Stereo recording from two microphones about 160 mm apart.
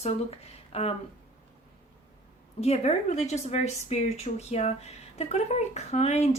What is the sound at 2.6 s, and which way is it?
A woman's voice, 40° left (ahead or behind).